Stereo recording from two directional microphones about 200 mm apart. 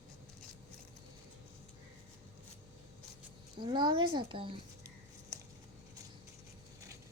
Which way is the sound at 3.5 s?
25° right (ahead or behind).